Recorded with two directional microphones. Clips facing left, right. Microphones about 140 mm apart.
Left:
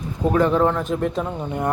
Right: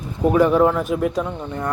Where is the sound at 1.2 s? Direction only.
15° left (ahead or behind).